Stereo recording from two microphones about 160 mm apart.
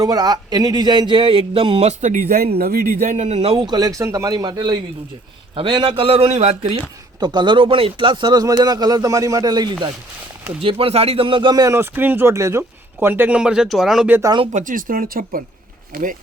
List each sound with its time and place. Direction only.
0.0 s speech: 25° right (ahead or behind); by 2.3 s 50° right (ahead or behind)
2.6 s a man's voice: 70° right (ahead or behind); by 9.7 s 25° right (ahead or behind)
10.6 s speech: 35° right (ahead or behind); by 14.1 s centre (ahead or behind)
14.1 s a man's voice: 20° right (ahead or behind)
14.5 s speech: 55° right (ahead or behind)